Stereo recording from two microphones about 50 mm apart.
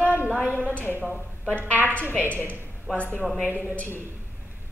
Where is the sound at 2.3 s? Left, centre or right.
Left.